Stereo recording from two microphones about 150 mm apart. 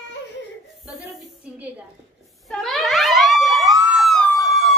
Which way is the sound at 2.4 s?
Centre (ahead or behind).